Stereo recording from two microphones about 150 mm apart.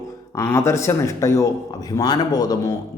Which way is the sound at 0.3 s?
20° left (ahead or behind).